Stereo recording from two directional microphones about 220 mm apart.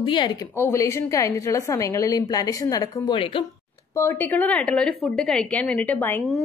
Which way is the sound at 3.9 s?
10° left (ahead or behind).